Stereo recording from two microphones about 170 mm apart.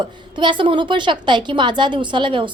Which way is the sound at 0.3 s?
30° right (ahead or behind).